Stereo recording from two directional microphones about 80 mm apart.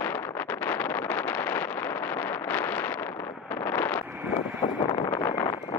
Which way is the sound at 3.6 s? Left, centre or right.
Left.